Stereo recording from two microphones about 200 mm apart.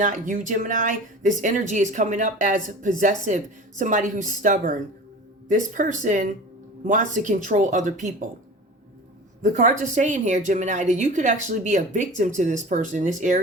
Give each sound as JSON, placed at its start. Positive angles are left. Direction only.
{"t": 0.0, "sound": "a woman's voice", "side_deg": -40}
{"t": 9.4, "sound": "a woman's voice", "side_deg": -40}